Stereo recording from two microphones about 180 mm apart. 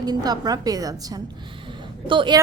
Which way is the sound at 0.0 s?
20° right (ahead or behind).